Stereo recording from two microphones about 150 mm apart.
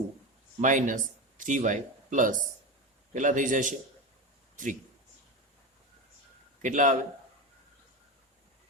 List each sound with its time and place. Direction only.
0.6 s a man's voice: 60° right (ahead or behind)
6.6 s a man's voice: 55° right (ahead or behind)